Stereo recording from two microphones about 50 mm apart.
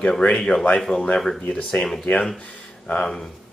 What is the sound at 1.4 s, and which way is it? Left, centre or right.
Speech, left.